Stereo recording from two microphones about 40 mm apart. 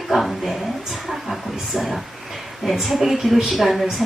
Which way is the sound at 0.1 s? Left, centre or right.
Centre.